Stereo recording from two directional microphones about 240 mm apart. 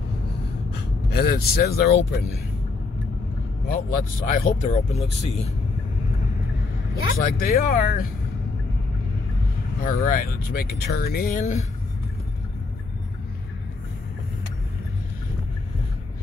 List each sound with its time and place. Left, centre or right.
1.1 s speech: left
3.6 s speech: left
7.3 s speech: left
9.8 s speech: left